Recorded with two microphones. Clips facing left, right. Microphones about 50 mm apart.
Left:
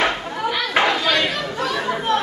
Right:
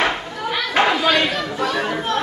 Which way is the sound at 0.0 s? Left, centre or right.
Centre.